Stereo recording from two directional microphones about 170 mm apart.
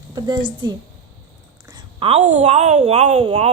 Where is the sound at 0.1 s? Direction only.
25° right (ahead or behind).